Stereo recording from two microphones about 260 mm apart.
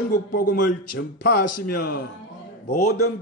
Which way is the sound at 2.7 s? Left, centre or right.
Left.